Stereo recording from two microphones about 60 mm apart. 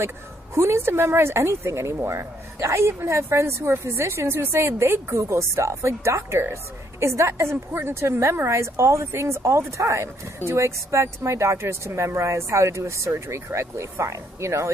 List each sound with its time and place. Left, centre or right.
0.6 s a woman's voice: right